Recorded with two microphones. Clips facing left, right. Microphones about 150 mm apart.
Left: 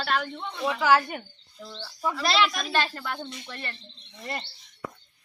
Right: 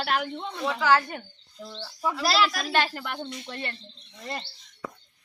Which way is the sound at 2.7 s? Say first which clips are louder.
Right 1 dB; 15° right (ahead or behind).